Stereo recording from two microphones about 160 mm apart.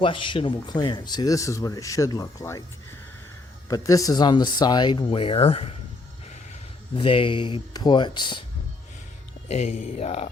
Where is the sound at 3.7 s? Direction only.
20° left (ahead or behind); by 5.7 s 35° left (ahead or behind).